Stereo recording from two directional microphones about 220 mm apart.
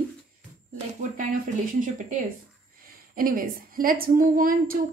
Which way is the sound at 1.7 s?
35° right (ahead or behind).